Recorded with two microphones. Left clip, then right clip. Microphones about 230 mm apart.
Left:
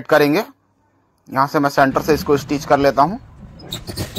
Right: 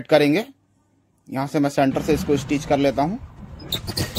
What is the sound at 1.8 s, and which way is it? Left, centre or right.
Speech, centre.